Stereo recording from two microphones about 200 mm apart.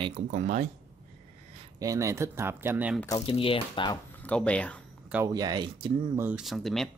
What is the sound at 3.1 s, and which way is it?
Speech, 30° left (ahead or behind).